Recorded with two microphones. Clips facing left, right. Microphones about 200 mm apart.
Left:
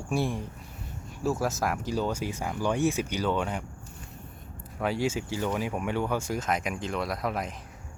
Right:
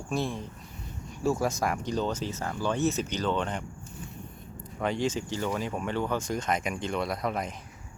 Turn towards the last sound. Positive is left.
turn(degrees=0)  # may be behind; listen again after turning